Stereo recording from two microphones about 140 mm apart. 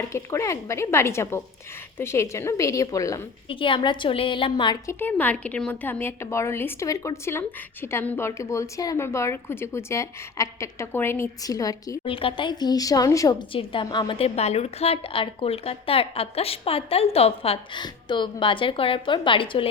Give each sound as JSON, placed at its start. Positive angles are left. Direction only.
{"t": 0.1, "sound": "a woman's voice", "side_deg": 20}
{"t": 3.5, "sound": "a woman's voice", "side_deg": 35}
{"t": 4.9, "sound": "a woman's voice", "side_deg": 15}
{"t": 12.0, "sound": "a woman's voice", "side_deg": 40}
{"t": 13.5, "sound": "a woman's voice", "side_deg": 40}